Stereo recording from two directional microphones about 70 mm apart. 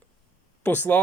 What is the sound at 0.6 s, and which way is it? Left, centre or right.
Speech, left.